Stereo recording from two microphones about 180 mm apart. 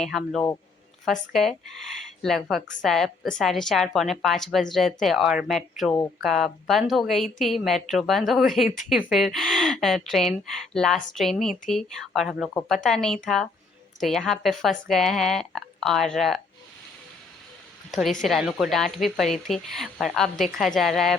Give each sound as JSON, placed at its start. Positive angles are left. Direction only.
{"t": 0.0, "sound": "a woman's voice", "side_deg": 0}
{"t": 18.2, "sound": "a woman's voice", "side_deg": 0}